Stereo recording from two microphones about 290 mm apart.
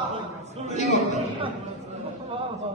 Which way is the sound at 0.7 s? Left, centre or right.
Left.